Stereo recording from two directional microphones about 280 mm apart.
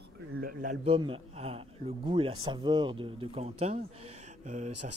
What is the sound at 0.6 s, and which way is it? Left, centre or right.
A man's voice, right.